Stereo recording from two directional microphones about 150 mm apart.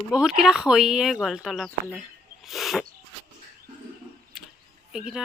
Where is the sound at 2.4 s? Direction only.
Centre (ahead or behind).